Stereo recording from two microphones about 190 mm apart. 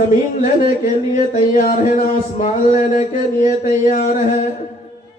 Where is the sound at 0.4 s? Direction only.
45° left (ahead or behind).